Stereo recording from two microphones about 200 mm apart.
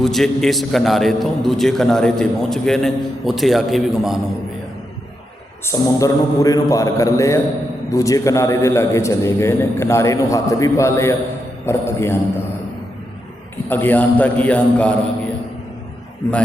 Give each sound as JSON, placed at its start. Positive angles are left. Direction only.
{"t": 0.0, "sound": "a man's voice", "side_deg": 0}
{"t": 5.6, "sound": "a man's voice", "side_deg": 15}
{"t": 13.7, "sound": "a man's voice", "side_deg": 10}